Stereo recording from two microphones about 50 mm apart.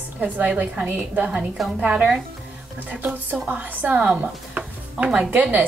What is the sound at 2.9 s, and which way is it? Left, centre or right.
Speech, right.